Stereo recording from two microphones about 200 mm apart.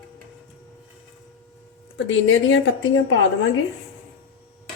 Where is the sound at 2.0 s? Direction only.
70° left (ahead or behind).